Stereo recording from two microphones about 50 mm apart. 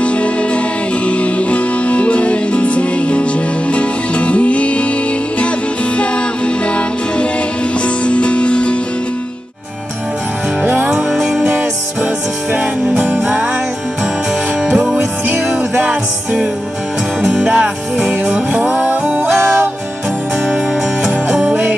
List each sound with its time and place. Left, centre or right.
0.0 s music: left
5.9 s music: left
10.6 s music: right
10.9 s music: centre
11.4 s music: right
14.8 s music: right
17.2 s music: centre
21.0 s music: centre